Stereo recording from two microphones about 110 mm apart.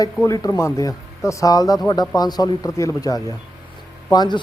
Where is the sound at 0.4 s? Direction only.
30° left (ahead or behind).